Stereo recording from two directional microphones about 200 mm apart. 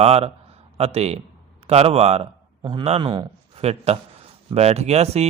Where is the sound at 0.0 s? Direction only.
30° right (ahead or behind).